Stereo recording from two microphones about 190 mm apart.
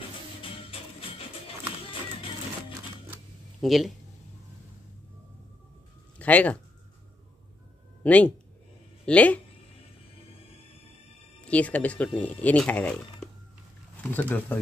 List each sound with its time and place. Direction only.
0.4 s music: 30° left (ahead or behind)
3.6 s speech: centre (ahead or behind)
6.1 s speech: 10° left (ahead or behind)
8.0 s speech: 10° left (ahead or behind)
11.4 s speech: 5° left (ahead or behind)